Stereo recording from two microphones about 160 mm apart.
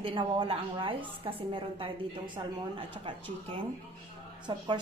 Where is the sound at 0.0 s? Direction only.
35° right (ahead or behind).